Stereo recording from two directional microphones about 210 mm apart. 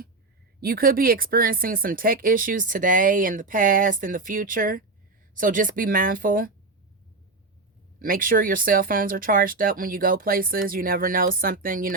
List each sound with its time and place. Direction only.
0.6 s speech: 45° right (ahead or behind)
7.9 s speech: 40° right (ahead or behind)